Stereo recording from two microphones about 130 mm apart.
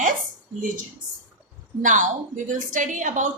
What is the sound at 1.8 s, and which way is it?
A woman's voice, 75° right (ahead or behind).